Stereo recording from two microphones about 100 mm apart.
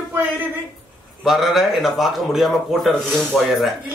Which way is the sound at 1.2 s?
5° right (ahead or behind).